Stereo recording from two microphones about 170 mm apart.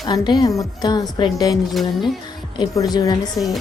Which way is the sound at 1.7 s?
Centre (ahead or behind).